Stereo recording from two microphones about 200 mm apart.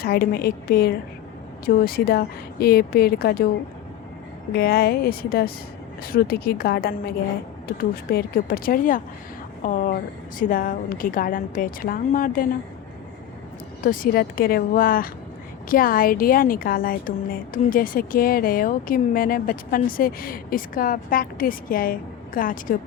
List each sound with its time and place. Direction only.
0.0 s a woman's voice: 50° left (ahead or behind)
4.5 s a woman's voice: 50° left (ahead or behind)
8.1 s a woman's voice: 45° left (ahead or behind)
13.8 s a woman's voice: 45° left (ahead or behind)